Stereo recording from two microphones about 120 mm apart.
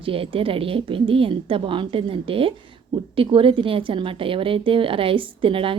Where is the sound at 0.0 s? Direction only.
50° right (ahead or behind).